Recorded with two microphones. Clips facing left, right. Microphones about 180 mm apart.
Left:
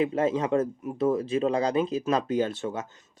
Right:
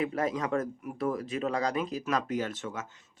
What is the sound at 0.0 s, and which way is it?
Speech, 25° left (ahead or behind).